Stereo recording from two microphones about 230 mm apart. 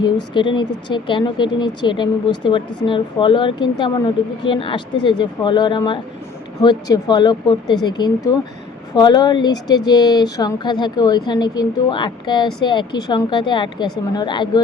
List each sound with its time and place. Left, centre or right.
0.3 s a woman's voice: left